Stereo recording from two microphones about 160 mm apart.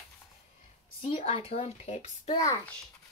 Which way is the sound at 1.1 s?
40° left (ahead or behind).